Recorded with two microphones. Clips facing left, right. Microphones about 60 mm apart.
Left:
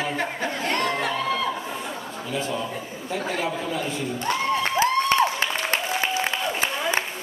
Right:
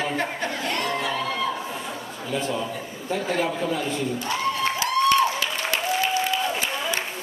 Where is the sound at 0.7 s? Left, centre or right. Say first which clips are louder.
Left 3 dB; left.